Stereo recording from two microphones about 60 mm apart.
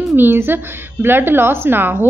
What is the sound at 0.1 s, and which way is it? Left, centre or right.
A woman's voice, right.